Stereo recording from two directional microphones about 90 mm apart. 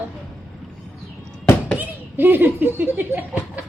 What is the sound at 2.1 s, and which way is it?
Chuckle, 25° right (ahead or behind).